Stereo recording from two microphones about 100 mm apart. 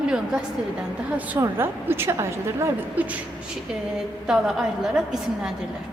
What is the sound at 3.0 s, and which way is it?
Speech, 15° right (ahead or behind).